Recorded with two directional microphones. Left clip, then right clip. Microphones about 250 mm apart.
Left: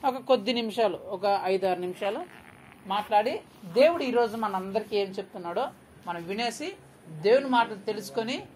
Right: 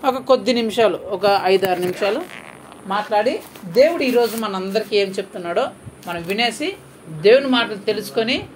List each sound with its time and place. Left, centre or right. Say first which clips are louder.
0.0 s speech: right 8 dB; centre
2.9 s speech: right 7 dB; left